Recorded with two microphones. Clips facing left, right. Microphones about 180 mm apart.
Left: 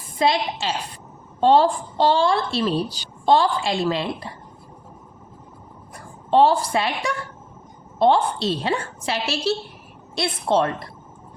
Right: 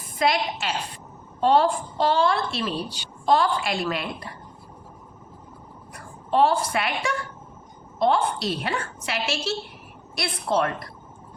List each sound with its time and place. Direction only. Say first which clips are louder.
0.2 s a woman's voice: left 2 dB; 25° left (ahead or behind)
5.9 s a woman's voice: left 5 dB; 30° left (ahead or behind)